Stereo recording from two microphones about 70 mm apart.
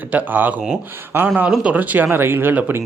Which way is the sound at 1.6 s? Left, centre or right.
Right.